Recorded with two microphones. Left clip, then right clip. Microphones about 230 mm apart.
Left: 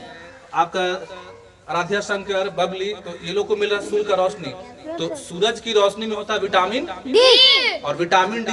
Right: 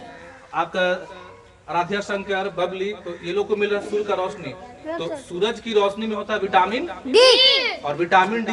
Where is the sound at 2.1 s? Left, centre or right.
Left.